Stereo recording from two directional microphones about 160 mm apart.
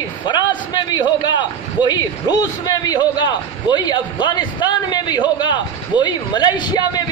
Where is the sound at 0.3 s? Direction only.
25° left (ahead or behind).